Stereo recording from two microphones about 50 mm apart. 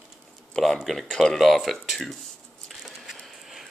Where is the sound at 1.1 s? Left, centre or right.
Centre.